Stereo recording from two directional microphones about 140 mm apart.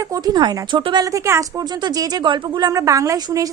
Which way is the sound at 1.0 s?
20° right (ahead or behind).